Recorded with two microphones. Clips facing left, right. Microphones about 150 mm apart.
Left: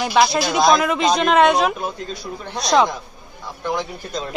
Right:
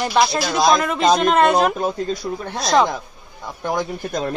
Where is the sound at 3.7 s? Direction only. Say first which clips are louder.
Right 3 dB; 55° right (ahead or behind).